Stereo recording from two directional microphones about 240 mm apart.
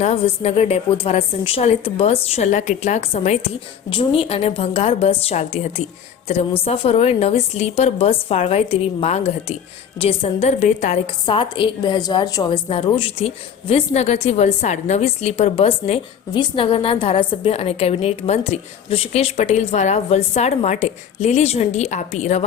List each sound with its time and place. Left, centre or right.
0.0 s a woman's voice: left